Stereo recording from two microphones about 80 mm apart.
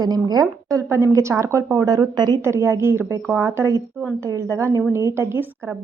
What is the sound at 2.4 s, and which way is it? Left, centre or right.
A woman's voice, right.